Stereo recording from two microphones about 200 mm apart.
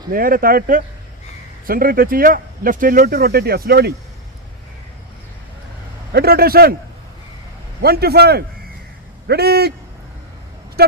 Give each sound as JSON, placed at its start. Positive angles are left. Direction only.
{"t": 0.1, "sound": "speech", "side_deg": -45}
{"t": 6.1, "sound": "speech", "side_deg": -50}
{"t": 7.8, "sound": "speech", "side_deg": -50}
{"t": 10.8, "sound": "speech", "side_deg": -50}